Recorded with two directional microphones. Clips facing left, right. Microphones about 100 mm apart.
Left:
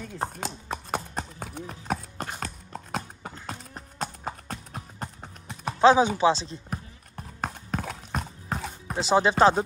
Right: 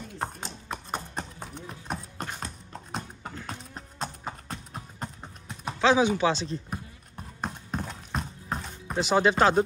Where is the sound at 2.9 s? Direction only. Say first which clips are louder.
Left 2 dB; 10° left (ahead or behind).